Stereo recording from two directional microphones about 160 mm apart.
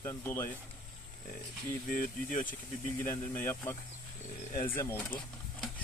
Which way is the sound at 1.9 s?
60° left (ahead or behind).